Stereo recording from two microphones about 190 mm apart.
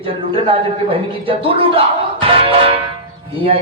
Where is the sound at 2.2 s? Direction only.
30° right (ahead or behind).